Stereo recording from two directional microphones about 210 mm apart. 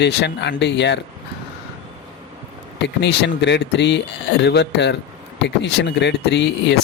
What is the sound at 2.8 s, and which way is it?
Speech, 55° left (ahead or behind).